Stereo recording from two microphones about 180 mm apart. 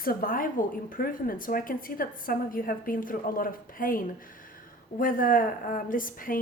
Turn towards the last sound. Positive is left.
turn(degrees=50)  # may be behind; listen again after turning